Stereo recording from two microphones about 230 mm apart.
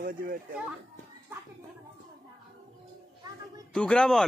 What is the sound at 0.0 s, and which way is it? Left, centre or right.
Speech, right.